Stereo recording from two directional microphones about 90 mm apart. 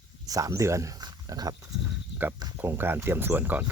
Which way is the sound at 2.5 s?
25° right (ahead or behind).